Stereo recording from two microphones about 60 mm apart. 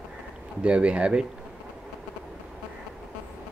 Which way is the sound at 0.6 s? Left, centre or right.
Centre.